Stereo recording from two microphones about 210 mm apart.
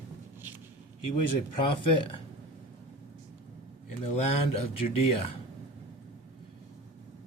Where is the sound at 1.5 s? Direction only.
25° left (ahead or behind).